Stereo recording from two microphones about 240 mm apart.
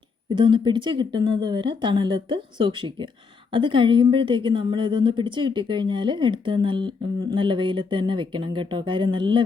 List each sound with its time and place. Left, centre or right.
0.3 s speech: centre